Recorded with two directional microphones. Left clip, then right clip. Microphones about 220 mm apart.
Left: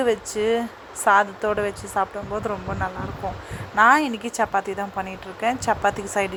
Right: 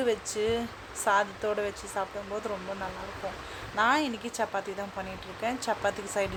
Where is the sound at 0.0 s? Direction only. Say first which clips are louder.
Left 7 dB; 15° left (ahead or behind).